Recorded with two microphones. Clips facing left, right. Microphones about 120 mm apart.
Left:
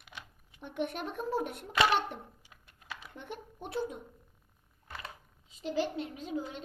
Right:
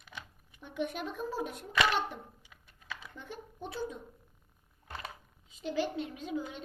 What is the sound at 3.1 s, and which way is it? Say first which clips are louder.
Speech: left 2 dB; 65° left (ahead or behind).